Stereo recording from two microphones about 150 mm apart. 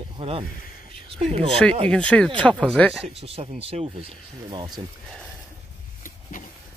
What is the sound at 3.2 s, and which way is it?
Speech, 40° right (ahead or behind).